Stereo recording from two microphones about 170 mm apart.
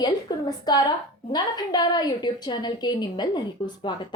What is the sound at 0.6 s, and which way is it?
A woman's voice, 25° left (ahead or behind).